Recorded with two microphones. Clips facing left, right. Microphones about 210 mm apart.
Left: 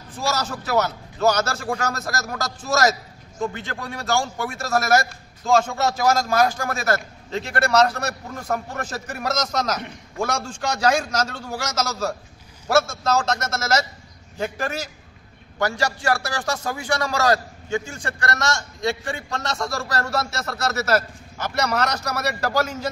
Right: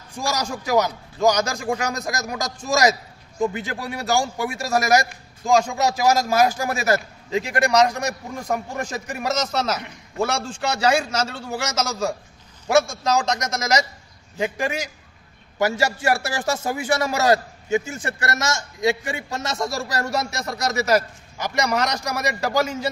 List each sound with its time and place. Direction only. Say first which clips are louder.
0.2 s a man's voice: even; 15° right (ahead or behind)
7.2 s a man's voice: right 2 dB; 5° right (ahead or behind)
16.0 s a sound: right 1 dB; 20° right (ahead or behind)
17.0 s a man's voice: right 1 dB; 20° right (ahead or behind)